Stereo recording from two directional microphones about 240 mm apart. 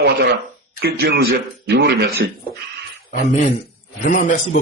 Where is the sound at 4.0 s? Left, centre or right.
Left.